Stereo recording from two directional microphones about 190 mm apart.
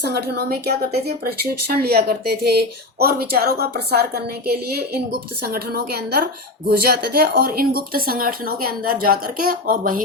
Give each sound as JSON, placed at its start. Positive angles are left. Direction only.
{"t": 0.3, "sound": "a woman's voice", "side_deg": -55}